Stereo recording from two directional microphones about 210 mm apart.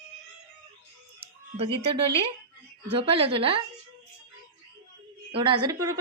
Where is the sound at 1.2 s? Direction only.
25° right (ahead or behind).